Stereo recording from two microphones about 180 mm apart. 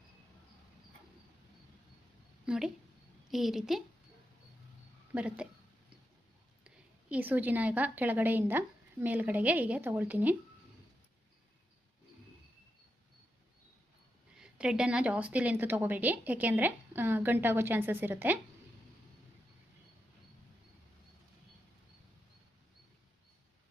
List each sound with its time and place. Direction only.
2.5 s a woman's voice: 5° right (ahead or behind)
5.1 s a woman's voice: 5° right (ahead or behind)
6.7 s a woman's voice: 10° right (ahead or behind)
14.3 s a woman's voice: 5° right (ahead or behind)